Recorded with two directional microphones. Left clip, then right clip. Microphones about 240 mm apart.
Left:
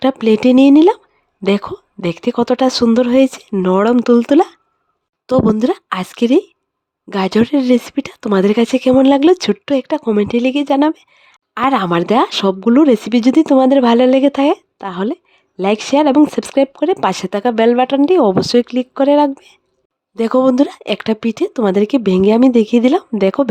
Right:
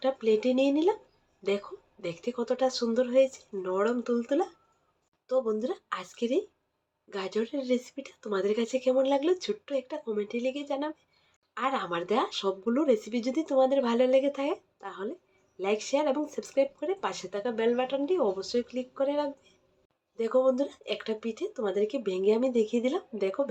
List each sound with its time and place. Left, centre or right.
0.0 s speech: left